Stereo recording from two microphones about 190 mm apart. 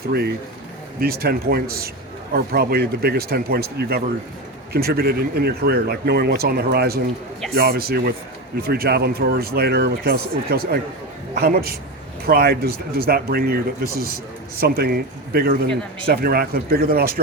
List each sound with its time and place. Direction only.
0.1 s speech: 55° right (ahead or behind)